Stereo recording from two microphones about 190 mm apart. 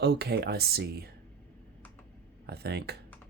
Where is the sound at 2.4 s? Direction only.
60° right (ahead or behind).